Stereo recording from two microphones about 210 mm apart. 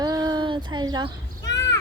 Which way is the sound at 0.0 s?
20° right (ahead or behind).